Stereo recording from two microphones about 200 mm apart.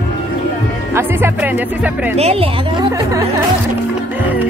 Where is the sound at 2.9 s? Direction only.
15° right (ahead or behind).